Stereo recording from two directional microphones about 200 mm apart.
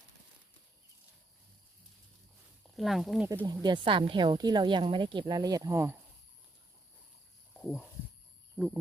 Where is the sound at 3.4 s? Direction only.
20° right (ahead or behind).